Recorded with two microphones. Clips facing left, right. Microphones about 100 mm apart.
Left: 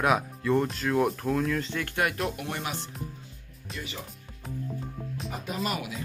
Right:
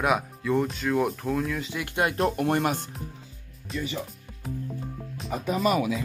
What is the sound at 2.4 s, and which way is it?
Speech, 50° right (ahead or behind).